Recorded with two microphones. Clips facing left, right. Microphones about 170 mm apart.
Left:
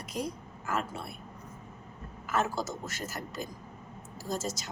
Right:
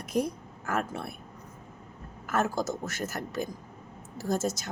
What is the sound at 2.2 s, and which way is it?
A woman's voice, 50° right (ahead or behind).